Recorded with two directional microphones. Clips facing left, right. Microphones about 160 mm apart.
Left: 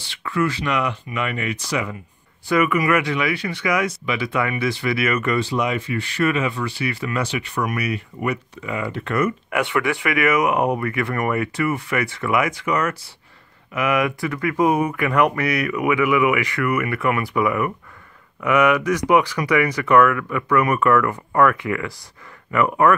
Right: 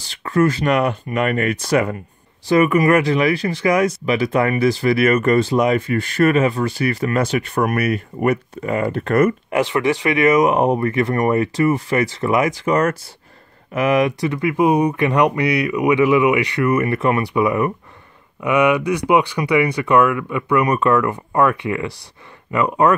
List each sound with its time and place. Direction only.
0.0 s speech: 40° right (ahead or behind)
2.5 s speech: 35° right (ahead or behind)
9.5 s speech: 30° right (ahead or behind); by 15.8 s 15° right (ahead or behind)
15.8 s speech: 30° right (ahead or behind)
19.6 s speech: 15° right (ahead or behind)